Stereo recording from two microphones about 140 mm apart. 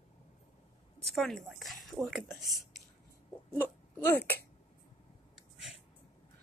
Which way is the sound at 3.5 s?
15° left (ahead or behind).